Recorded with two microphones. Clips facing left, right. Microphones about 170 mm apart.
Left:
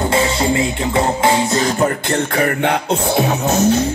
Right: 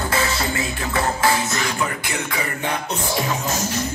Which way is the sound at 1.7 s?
50° left (ahead or behind).